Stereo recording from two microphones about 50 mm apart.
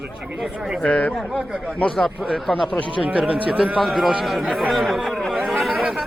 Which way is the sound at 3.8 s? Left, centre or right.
Centre.